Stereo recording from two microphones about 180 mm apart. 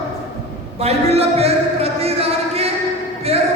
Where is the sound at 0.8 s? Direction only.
35° right (ahead or behind).